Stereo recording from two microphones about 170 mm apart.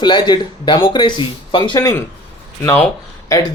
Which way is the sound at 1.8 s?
15° left (ahead or behind).